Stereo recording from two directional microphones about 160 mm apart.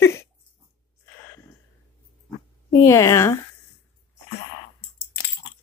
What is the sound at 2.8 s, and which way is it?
Speech, 20° left (ahead or behind).